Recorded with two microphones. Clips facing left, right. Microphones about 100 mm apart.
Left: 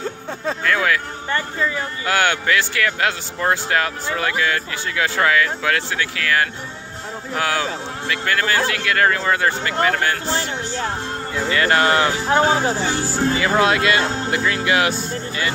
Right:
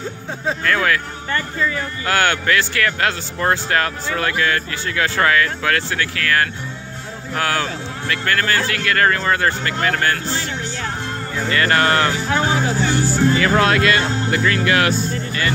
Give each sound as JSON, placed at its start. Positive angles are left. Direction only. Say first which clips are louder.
{"t": 0.7, "sound": "speech", "louder": "even", "side_deg": 10}
{"t": 11.5, "sound": "speech", "louder": "even", "side_deg": 15}
{"t": 12.1, "sound": "speech", "louder": "left 2 dB", "side_deg": 30}
{"t": 13.4, "sound": "speech", "louder": "right 1 dB", "side_deg": 15}